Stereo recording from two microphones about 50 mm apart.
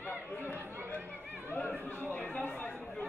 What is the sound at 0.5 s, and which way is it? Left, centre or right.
Chatter, right.